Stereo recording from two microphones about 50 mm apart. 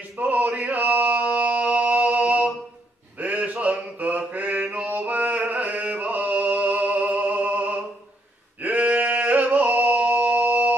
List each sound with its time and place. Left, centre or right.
0.2 s chant: right
3.2 s a sound: right
4.3 s mantra: right
8.6 s yodeling: right